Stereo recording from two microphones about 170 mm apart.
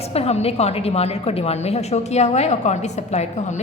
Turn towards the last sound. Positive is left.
turn(degrees=40)  # may be behind; listen again after turning